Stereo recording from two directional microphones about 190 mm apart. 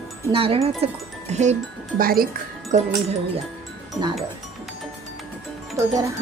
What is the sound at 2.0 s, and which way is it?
Speech, 50° right (ahead or behind).